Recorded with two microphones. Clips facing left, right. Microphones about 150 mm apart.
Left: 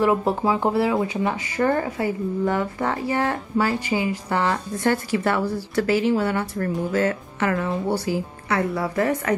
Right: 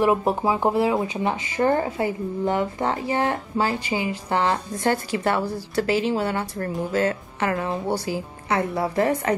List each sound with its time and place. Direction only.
0.0 s speech: 15° right (ahead or behind)
7.9 s speech: 15° right (ahead or behind)
8.8 s speech: 30° right (ahead or behind)